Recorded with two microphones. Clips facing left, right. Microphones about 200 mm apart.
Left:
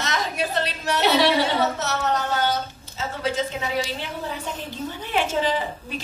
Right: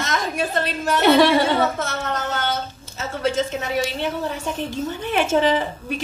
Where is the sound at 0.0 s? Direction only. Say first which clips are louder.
Right 2 dB; 50° right (ahead or behind).